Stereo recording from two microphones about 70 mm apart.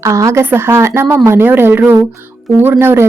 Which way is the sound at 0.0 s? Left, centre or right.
Right.